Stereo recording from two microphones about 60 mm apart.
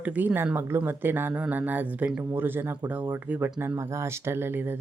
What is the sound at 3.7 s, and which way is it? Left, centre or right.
Speech, right.